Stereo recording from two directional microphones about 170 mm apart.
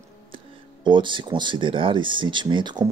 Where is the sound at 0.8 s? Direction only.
30° right (ahead or behind).